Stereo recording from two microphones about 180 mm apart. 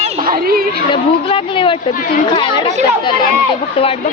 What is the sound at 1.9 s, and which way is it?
Speech, 50° left (ahead or behind).